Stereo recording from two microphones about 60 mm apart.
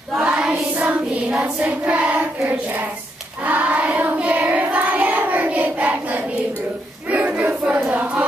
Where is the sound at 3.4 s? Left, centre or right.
Right.